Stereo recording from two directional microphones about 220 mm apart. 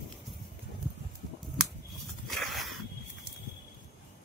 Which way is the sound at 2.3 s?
Centre (ahead or behind).